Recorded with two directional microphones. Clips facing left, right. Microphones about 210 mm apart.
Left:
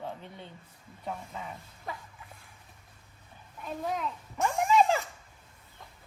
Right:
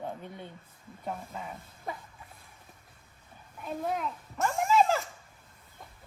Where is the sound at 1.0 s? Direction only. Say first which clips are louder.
Right 1 dB; 5° right (ahead or behind).